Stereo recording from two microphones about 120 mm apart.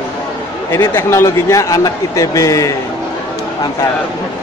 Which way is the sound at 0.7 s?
20° left (ahead or behind).